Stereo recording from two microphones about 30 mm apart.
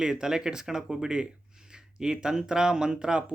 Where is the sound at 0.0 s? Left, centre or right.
Centre.